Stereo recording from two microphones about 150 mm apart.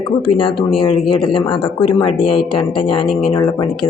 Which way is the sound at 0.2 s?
35° left (ahead or behind).